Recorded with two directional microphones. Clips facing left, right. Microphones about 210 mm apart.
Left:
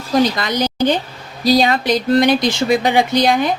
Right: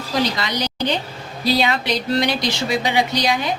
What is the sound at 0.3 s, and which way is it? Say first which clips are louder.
Speech: left 6 dB; 50° left (ahead or behind).